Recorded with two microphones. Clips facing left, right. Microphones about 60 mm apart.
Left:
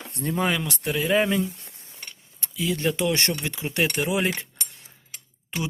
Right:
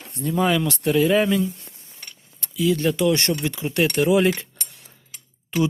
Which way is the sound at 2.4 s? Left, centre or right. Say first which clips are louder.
Right 5 dB; left.